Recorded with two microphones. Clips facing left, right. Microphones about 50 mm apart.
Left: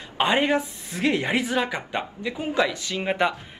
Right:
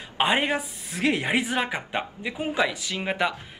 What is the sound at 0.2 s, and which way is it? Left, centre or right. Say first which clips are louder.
Speech: left 2 dB; centre.